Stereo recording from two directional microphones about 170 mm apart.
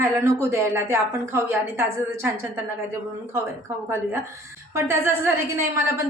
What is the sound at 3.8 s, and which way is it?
A woman's voice, 15° right (ahead or behind).